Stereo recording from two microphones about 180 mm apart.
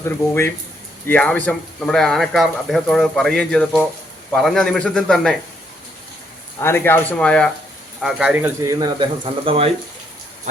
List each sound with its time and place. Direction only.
0.0 s speech: 15° left (ahead or behind)
6.6 s speech: 10° left (ahead or behind)
8.0 s speech: 5° right (ahead or behind); by 9.6 s 30° right (ahead or behind)